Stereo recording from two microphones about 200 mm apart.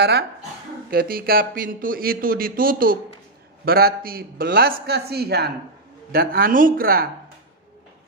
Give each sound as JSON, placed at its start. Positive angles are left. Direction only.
{"t": 0.8, "sound": "speech", "side_deg": -45}